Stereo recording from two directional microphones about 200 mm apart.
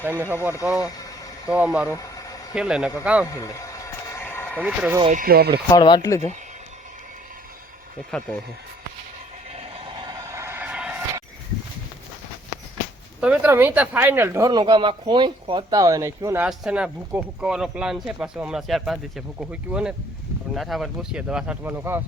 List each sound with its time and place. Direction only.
0.0 s speech: 10° right (ahead or behind)
0.8 s speech: 20° left (ahead or behind)
1.5 s speech: 5° right (ahead or behind)
1.9 s a sound: 15° left (ahead or behind)
2.6 s speech: 5° right (ahead or behind)
3.2 s a sound: 15° left (ahead or behind)
4.6 s speech: 5° right (ahead or behind)
5.1 s speech: 50° right (ahead or behind)
5.7 s speech: 20° left (ahead or behind)
9.5 s vehicle: 30° right (ahead or behind); by 10.9 s 5° right (ahead or behind)
13.1 s speech: 5° right (ahead or behind)